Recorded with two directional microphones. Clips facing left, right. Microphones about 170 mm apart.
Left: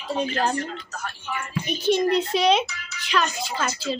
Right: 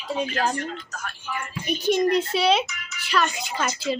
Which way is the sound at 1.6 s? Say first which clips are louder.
Even; 10° right (ahead or behind).